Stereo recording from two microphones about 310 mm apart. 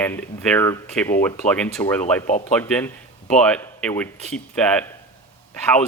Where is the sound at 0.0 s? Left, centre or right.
Centre.